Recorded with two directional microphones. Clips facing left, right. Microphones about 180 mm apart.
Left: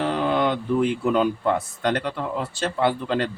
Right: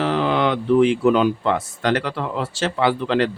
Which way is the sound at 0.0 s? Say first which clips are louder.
Right 2 dB; 85° right.